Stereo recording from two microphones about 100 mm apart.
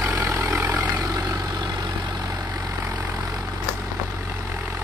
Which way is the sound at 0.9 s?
35° right (ahead or behind).